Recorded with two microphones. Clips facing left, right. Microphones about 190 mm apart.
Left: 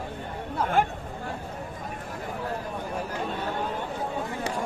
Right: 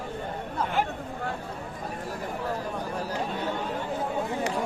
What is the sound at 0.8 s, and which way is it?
Speech, 50° left (ahead or behind).